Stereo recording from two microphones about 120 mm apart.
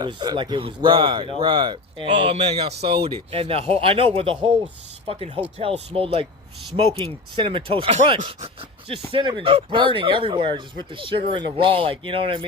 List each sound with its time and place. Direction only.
0.0 s speech: 40° right (ahead or behind)
2.3 s speech: 55° right (ahead or behind)
8.2 s speech: 65° right (ahead or behind)
9.1 s speech: 45° right (ahead or behind)